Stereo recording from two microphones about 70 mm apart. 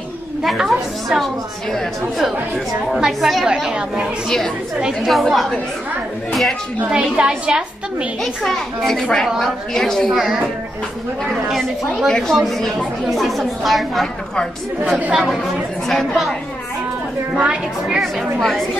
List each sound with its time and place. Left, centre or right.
0.4 s a woman's voice: centre
5.1 s a woman's voice: centre
6.9 s a woman's voice: centre
8.2 s a woman's voice: centre
14.8 s a woman's voice: right
15.9 s a woman's voice: centre
17.8 s a woman's voice: centre